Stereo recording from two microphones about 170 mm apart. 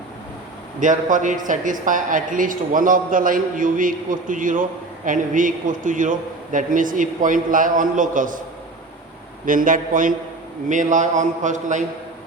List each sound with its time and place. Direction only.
0.8 s a woman's voice: 50° right (ahead or behind)
9.5 s a woman's voice: 55° right (ahead or behind)